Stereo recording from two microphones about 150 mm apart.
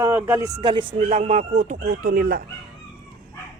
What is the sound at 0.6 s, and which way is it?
Speech, 35° right (ahead or behind).